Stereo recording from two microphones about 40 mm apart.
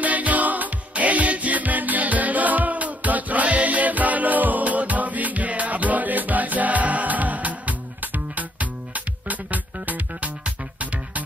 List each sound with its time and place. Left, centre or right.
0.0 s music: right